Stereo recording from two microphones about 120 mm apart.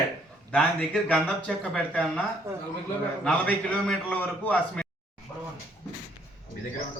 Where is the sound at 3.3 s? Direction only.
10° left (ahead or behind).